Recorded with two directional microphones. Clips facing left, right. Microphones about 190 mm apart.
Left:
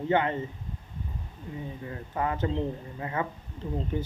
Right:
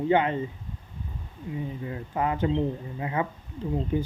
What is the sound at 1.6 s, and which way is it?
Speech, 20° right (ahead or behind).